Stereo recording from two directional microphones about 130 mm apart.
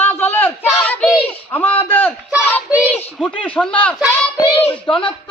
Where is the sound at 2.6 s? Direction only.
10° right (ahead or behind).